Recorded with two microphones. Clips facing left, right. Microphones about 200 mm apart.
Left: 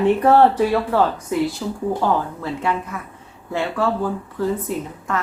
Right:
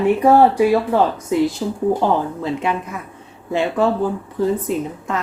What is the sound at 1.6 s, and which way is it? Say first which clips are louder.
Speech: right 4 dB; 25° right (ahead or behind).